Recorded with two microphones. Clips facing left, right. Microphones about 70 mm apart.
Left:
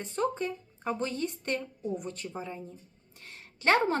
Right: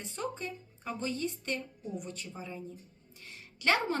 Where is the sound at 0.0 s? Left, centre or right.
Left.